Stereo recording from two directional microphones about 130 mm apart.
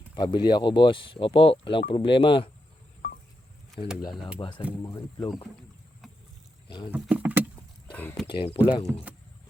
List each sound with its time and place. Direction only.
0.1 s speech: 40° left (ahead or behind)
4.4 s speech: 35° left (ahead or behind)
4.8 s speech: 25° left (ahead or behind)
6.7 s rowboat: 40° left (ahead or behind)
6.9 s speech: 10° right (ahead or behind)
8.3 s speech: 40° left (ahead or behind)
8.9 s speech: 10° right (ahead or behind)